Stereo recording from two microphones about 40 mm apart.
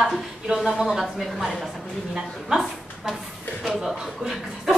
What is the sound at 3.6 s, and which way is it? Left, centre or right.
Speech, centre.